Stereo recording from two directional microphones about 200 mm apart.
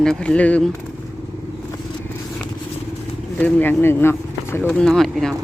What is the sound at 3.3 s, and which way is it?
Speech, 5° left (ahead or behind).